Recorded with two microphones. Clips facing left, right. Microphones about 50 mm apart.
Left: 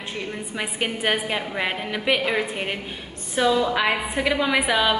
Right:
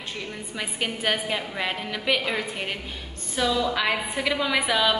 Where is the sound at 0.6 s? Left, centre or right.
Centre.